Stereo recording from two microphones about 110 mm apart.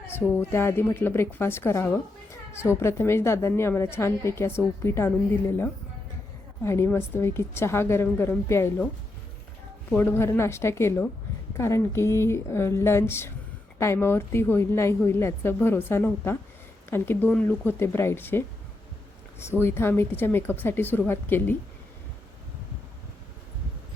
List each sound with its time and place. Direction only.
0.5 s a woman's voice: 20° left (ahead or behind)
9.9 s a woman's voice: 20° left (ahead or behind)